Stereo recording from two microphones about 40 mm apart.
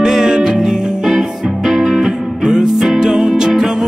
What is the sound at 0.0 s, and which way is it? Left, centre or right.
Music, centre.